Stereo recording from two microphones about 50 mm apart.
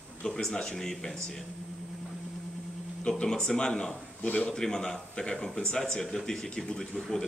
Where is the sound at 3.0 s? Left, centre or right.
Centre.